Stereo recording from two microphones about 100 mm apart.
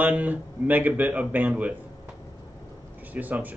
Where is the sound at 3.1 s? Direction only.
15° right (ahead or behind).